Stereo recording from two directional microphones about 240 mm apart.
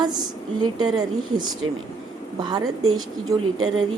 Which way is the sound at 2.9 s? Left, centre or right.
Centre.